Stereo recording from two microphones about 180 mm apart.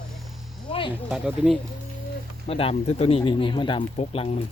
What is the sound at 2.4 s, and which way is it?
Speech, 30° left (ahead or behind).